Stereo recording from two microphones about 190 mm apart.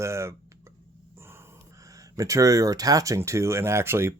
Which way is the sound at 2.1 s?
15° right (ahead or behind).